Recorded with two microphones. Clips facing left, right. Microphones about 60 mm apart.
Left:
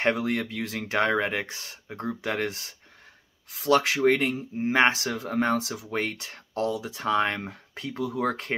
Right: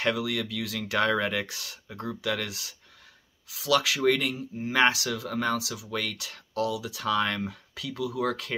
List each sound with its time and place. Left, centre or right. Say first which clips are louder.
0.0 s speech: left 3 dB; left